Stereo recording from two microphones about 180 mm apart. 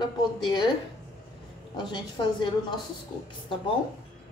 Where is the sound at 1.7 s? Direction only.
25° left (ahead or behind).